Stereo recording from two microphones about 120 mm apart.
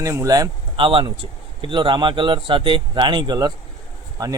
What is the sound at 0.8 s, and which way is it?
Speech, 45° right (ahead or behind).